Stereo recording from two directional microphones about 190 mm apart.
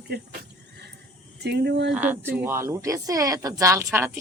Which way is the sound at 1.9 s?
10° right (ahead or behind).